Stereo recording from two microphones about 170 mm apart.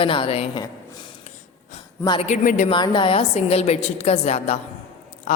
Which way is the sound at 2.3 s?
50° left (ahead or behind).